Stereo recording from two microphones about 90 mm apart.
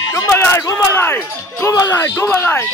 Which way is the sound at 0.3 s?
25° left (ahead or behind).